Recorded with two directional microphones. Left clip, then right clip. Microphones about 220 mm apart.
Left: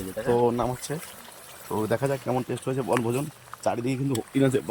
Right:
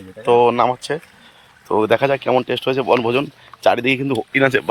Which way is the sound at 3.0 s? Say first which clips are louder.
Right 10 dB; 75° right (ahead or behind).